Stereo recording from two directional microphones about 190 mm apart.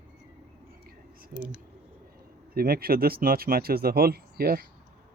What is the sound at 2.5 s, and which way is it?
Speech, 50° right (ahead or behind).